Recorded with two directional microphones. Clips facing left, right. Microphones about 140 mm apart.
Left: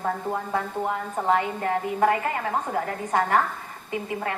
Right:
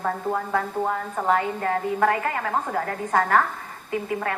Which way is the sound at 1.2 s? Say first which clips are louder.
Right 1 dB; 25° left (ahead or behind).